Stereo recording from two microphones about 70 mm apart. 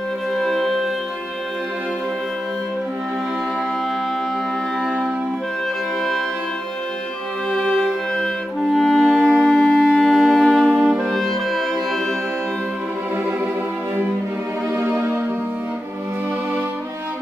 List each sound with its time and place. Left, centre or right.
0.4 s music: centre
7.5 s music: centre
8.7 s wind instrument: centre
11.1 s music: centre
14.7 s music: right